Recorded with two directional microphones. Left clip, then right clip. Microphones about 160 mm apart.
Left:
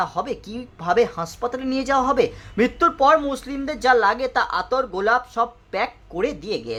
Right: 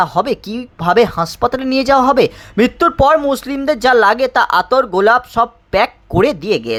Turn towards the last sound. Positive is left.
turn(degrees=-40)  # may be behind; listen again after turning